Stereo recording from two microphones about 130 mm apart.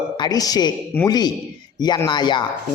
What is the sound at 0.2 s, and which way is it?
A man's voice, 30° left (ahead or behind).